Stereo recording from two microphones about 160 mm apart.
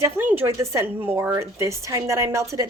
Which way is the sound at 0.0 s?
15° right (ahead or behind).